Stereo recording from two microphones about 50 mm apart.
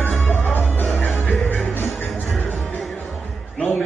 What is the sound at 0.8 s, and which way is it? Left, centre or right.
Music, left.